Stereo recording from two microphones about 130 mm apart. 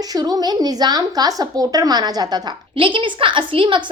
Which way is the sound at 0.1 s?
30° right (ahead or behind).